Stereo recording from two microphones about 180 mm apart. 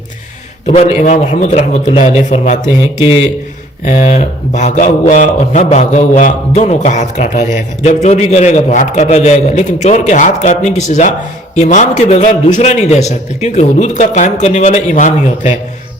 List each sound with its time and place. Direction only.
0.7 s a man's voice: 35° left (ahead or behind)